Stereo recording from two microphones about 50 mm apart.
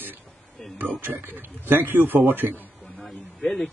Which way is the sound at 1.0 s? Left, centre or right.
Right.